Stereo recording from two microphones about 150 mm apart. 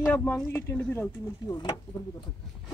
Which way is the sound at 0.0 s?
15° left (ahead or behind).